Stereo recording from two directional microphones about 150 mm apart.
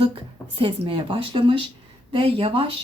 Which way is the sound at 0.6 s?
35° right (ahead or behind).